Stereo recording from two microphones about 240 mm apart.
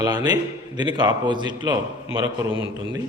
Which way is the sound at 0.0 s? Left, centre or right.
Centre.